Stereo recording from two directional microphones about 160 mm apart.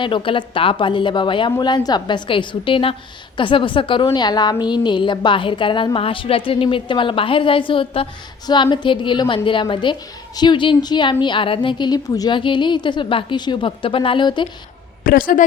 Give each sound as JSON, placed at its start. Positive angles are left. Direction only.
{"t": 0.0, "sound": "a woman's voice", "side_deg": 35}
{"t": 15.1, "sound": "a woman's voice", "side_deg": 60}